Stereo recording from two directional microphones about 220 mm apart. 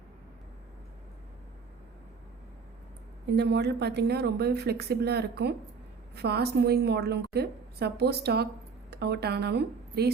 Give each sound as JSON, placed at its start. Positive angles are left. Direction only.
{"t": 3.3, "sound": "a woman's voice", "side_deg": -50}